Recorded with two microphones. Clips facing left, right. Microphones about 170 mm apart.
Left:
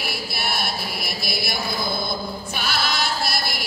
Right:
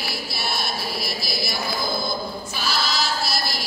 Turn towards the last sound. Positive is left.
turn(degrees=60)  # may be behind; listen again after turning